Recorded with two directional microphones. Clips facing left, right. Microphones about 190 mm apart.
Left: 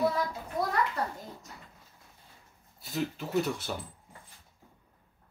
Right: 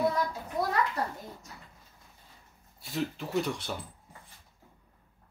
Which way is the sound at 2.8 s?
Centre (ahead or behind).